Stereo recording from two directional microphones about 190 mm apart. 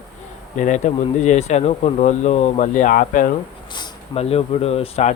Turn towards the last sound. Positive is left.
turn(degrees=35)  # may be behind; listen again after turning